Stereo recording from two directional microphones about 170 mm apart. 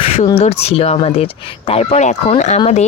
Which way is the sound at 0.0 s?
40° left (ahead or behind).